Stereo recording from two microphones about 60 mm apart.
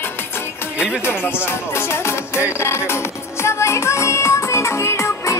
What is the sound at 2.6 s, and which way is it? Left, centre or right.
Music, left.